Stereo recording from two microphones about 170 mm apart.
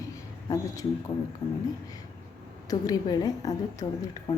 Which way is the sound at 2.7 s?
20° left (ahead or behind).